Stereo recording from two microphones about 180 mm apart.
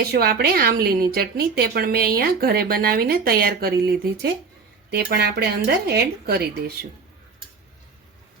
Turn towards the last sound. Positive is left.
turn(degrees=-60)  # may be behind; listen again after turning